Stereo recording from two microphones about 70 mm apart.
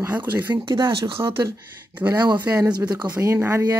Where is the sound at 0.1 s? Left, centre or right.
Right.